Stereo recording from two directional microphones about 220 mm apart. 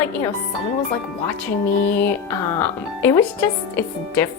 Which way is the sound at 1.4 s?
10° left (ahead or behind).